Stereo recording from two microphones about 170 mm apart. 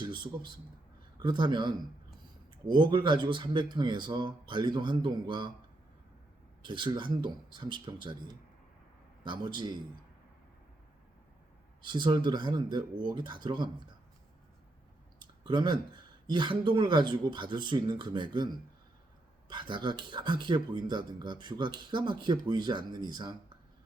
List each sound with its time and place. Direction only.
1.2 s speech: 25° right (ahead or behind)
6.6 s speech: 25° right (ahead or behind)
9.2 s speech: 25° right (ahead or behind)
11.9 s speech: 25° right (ahead or behind)
15.4 s speech: 25° right (ahead or behind)
19.5 s speech: 25° right (ahead or behind)